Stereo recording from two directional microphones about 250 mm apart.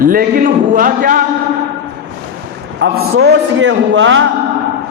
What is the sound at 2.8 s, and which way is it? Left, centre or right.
A man's voice, right.